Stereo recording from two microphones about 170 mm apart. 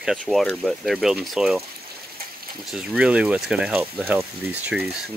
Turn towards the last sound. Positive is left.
turn(degrees=-10)  # may be behind; listen again after turning